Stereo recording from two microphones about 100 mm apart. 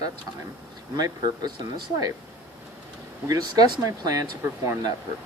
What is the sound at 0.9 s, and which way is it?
Speech, 40° right (ahead or behind).